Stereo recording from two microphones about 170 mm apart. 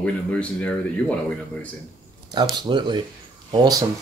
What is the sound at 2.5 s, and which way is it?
Speech, 25° right (ahead or behind).